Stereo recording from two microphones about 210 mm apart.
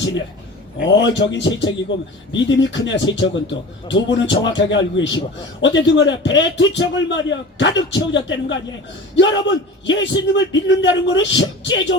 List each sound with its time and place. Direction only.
0.8 s a man's voice: 60° left (ahead or behind)